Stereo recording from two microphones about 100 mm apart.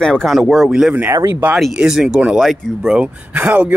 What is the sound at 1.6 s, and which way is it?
Speech, centre (ahead or behind).